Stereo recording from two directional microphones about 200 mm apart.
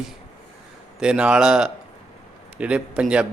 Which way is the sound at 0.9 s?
5° right (ahead or behind).